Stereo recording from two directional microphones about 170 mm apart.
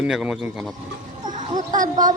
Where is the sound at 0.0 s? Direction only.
5° right (ahead or behind).